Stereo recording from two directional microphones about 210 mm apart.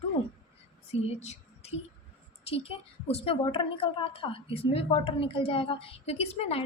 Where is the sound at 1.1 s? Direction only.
30° left (ahead or behind).